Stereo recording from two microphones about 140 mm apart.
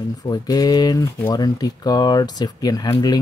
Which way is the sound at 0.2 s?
25° left (ahead or behind).